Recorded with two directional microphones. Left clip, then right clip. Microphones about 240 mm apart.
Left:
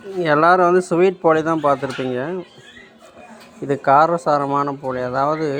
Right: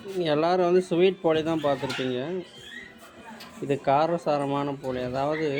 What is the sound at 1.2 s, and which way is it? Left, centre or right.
Speech, centre.